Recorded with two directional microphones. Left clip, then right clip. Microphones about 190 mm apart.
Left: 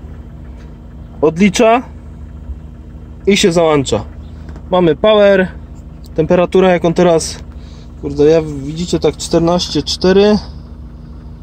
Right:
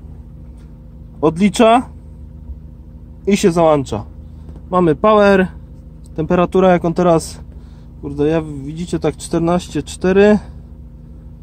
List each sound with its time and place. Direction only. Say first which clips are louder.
1.2 s speech: left 2 dB; 10° right (ahead or behind)
3.3 s speech: left 2 dB; 10° right (ahead or behind)